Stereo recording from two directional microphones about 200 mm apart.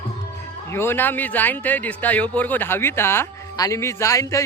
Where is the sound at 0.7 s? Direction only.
10° left (ahead or behind).